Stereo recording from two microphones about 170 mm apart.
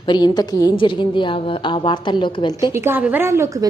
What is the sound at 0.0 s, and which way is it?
A woman's voice, 25° left (ahead or behind).